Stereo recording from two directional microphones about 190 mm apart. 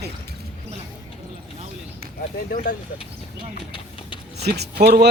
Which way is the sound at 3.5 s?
30° left (ahead or behind).